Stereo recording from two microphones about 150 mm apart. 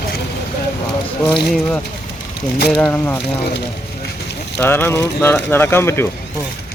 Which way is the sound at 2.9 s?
15° left (ahead or behind).